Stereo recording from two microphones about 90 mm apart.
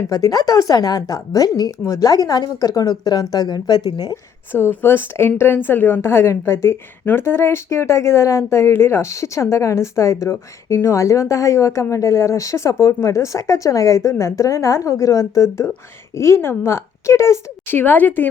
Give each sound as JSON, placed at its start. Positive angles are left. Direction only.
{"t": 0.1, "sound": "speech", "side_deg": 45}
{"t": 4.5, "sound": "a woman's voice", "side_deg": 25}